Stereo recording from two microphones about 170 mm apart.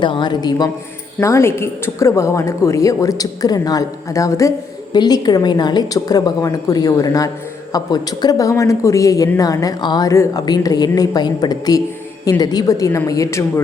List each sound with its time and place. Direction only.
0.0 s a woman's voice: 25° left (ahead or behind)